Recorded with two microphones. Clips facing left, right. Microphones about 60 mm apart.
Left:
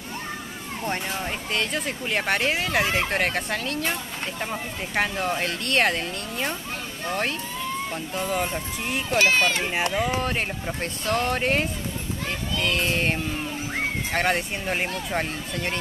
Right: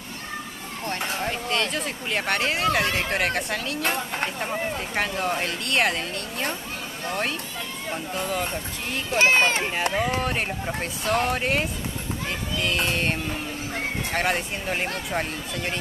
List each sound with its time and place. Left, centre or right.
1.5 s speech: centre
3.8 s speech: right
4.4 s speech: centre
7.1 s speech: centre
9.2 s speech: right
10.2 s speech: centre